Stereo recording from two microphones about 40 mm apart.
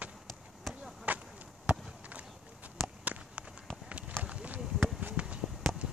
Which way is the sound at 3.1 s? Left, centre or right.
Right.